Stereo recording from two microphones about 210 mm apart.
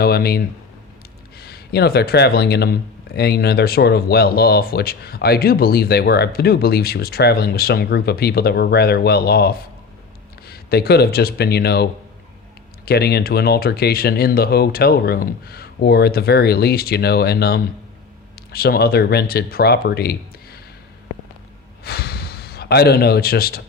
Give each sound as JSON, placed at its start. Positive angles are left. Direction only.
{"t": 0.0, "sound": "speech", "side_deg": 45}
{"t": 21.8, "sound": "gasp", "side_deg": 50}